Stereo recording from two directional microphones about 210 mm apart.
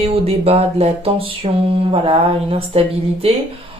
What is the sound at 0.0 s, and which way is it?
Music, 30° right (ahead or behind).